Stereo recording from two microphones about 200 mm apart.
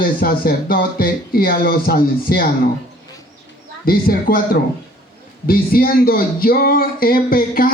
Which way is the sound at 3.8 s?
45° left (ahead or behind).